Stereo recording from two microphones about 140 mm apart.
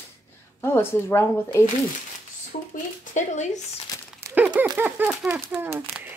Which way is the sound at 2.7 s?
60° left (ahead or behind).